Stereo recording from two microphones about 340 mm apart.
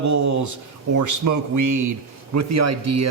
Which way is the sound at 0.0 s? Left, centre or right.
Right.